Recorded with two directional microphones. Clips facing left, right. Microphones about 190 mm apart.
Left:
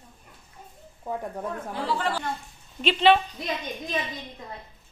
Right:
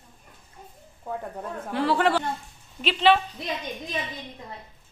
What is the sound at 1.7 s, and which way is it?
Speech, 65° right (ahead or behind).